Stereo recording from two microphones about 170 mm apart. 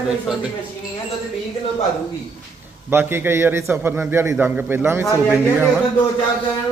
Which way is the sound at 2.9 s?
15° right (ahead or behind).